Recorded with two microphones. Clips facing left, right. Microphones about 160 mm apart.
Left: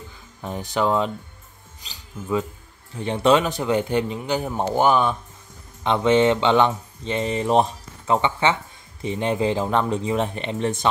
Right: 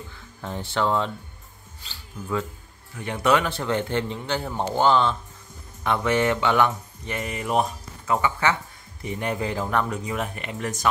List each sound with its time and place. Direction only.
0.4 s a man's voice: 15° left (ahead or behind)